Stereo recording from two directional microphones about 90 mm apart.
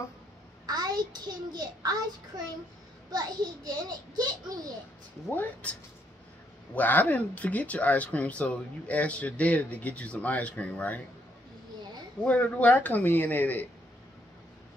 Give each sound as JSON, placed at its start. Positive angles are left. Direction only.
{"t": 0.7, "sound": "a child's voice", "side_deg": -50}
{"t": 5.3, "sound": "speech", "side_deg": 20}
{"t": 12.2, "sound": "speech", "side_deg": 15}